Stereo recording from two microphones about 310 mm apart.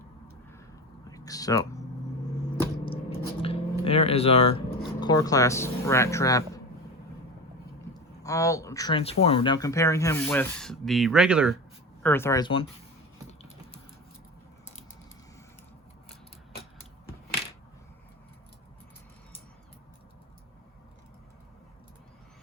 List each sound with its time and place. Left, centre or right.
1.1 s a sound: centre
3.4 s speech: centre
8.2 s speech: centre
12.0 s speech: centre